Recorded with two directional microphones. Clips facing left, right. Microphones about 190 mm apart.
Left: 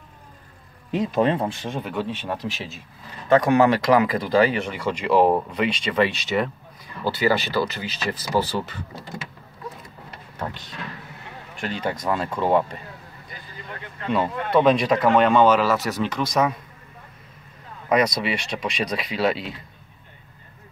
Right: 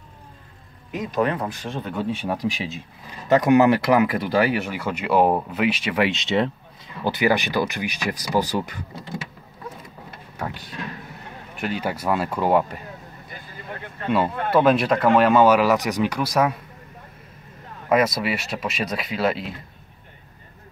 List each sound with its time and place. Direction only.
0.9 s speech: 30° left (ahead or behind)
2.0 s speech: 10° right (ahead or behind)
6.1 s speech: 25° right (ahead or behind)
10.3 s speech: 10° right (ahead or behind)
14.0 s speech: 5° right (ahead or behind)
17.8 s speech: 5° right (ahead or behind)